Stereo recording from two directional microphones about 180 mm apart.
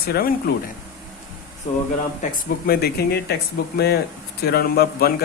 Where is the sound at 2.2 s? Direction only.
55° left (ahead or behind).